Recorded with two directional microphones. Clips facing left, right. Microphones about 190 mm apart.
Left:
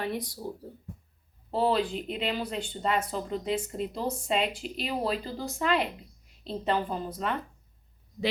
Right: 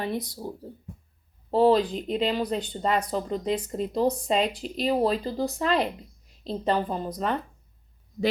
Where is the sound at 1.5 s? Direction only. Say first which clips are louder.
Right 6 dB; 40° right (ahead or behind).